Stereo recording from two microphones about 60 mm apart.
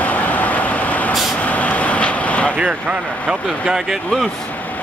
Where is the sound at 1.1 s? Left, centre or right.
Centre.